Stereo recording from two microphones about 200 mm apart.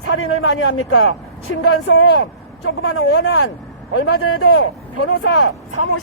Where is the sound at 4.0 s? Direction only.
90° left.